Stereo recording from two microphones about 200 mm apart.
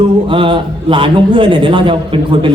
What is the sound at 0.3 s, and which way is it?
A man's voice, 25° right (ahead or behind).